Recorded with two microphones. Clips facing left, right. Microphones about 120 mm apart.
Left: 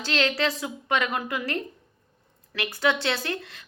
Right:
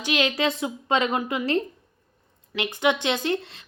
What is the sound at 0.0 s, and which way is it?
A woman's voice, 15° right (ahead or behind).